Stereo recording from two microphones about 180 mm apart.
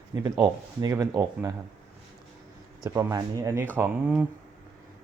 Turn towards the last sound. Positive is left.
turn(degrees=-10)  # may be behind; listen again after turning